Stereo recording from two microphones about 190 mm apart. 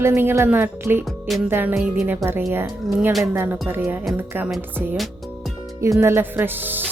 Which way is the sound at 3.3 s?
10° right (ahead or behind).